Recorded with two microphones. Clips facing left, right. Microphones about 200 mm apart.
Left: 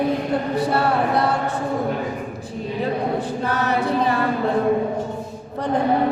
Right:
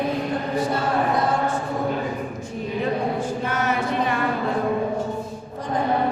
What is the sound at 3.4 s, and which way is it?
Choir, 35° left (ahead or behind).